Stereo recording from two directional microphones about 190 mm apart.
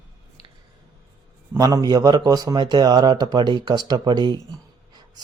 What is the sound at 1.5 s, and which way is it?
A man's voice, 20° right (ahead or behind).